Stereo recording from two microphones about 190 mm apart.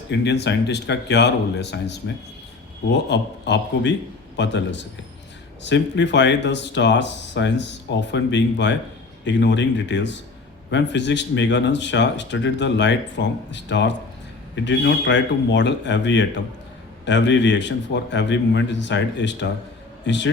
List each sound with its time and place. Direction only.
0.1 s speech: 65° left (ahead or behind)